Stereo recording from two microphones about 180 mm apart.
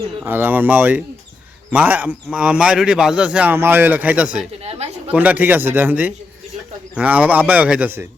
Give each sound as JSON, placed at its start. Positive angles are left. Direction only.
{"t": 0.2, "sound": "speech", "side_deg": -10}
{"t": 4.6, "sound": "a sound", "side_deg": -35}
{"t": 5.1, "sound": "speech", "side_deg": -10}